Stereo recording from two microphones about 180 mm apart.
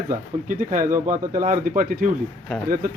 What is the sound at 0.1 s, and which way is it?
Speech, 50° right (ahead or behind).